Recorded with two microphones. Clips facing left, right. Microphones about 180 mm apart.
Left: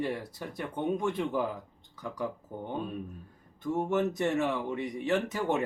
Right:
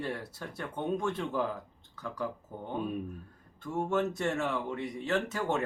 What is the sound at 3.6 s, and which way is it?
Speech, 20° left (ahead or behind).